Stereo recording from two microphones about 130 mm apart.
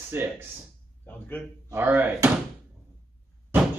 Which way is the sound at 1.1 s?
15° left (ahead or behind).